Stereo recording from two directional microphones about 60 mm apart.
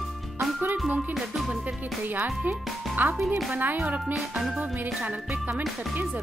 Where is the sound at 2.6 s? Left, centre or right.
Centre.